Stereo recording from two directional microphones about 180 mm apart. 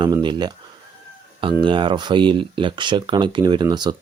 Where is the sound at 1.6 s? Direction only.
25° right (ahead or behind).